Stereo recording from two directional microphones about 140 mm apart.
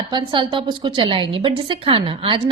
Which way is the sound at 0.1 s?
35° right (ahead or behind).